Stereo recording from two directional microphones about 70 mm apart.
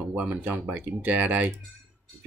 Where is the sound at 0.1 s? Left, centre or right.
Right.